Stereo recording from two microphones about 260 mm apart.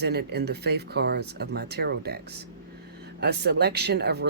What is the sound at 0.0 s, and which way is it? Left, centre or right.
Speech, right.